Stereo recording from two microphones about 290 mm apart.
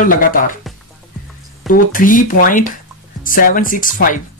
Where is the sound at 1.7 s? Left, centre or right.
Left.